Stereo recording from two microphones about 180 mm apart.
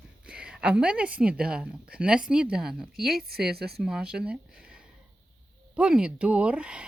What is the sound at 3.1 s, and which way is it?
Speech, 55° right (ahead or behind).